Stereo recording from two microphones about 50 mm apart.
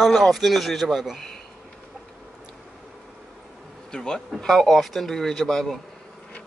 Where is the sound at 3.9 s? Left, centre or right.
Centre.